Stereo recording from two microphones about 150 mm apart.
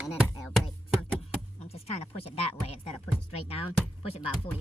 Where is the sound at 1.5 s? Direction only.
45° left (ahead or behind).